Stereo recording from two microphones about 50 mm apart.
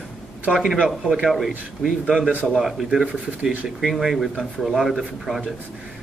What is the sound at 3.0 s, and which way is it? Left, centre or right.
Speech, right.